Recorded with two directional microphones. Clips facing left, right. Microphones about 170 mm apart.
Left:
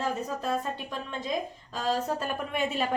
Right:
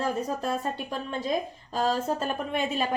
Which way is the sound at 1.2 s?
35° right (ahead or behind).